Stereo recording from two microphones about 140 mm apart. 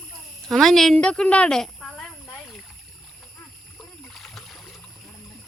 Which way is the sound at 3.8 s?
Centre (ahead or behind).